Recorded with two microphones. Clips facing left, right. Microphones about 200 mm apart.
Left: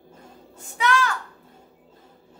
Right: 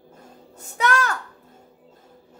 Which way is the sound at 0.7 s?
45° right (ahead or behind).